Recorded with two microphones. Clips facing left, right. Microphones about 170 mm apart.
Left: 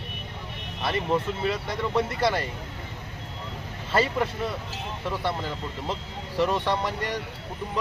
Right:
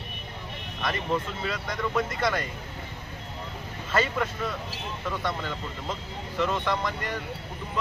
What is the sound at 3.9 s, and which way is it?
Speech, 30° left (ahead or behind).